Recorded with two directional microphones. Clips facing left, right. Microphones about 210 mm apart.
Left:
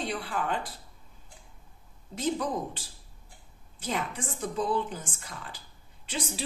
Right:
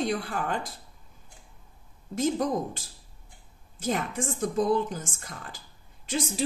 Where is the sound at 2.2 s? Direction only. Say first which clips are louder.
Right 4 dB; 45° right (ahead or behind).